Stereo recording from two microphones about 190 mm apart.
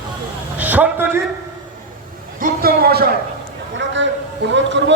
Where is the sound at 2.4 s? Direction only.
50° right (ahead or behind).